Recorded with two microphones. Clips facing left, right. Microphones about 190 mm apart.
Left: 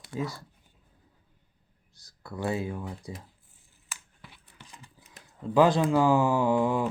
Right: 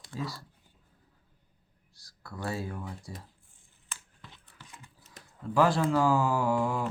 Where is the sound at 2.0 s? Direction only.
20° left (ahead or behind).